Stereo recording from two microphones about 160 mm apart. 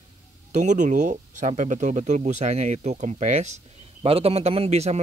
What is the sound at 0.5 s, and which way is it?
Speech, 50° right (ahead or behind).